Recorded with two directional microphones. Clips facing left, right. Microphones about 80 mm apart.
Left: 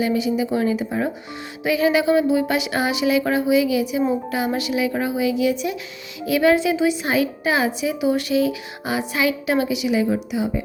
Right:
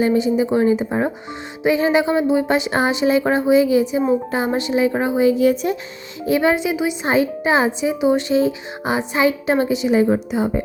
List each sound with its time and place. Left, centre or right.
0.0 s speech: right
6.2 s speech: right